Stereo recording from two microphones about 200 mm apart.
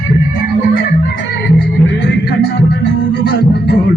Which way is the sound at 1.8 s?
60° left (ahead or behind).